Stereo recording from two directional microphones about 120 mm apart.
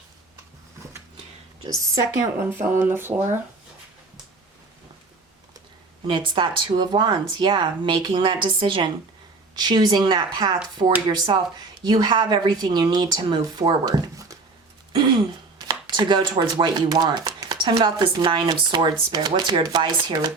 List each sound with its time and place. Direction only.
1.6 s speech: 30° right (ahead or behind)
6.1 s a woman's voice: 40° right (ahead or behind)
14.9 s a sound: 40° right (ahead or behind)
16.4 s a woman's voice: 35° right (ahead or behind)